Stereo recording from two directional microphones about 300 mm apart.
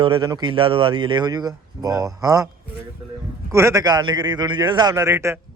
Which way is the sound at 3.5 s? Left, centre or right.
Centre.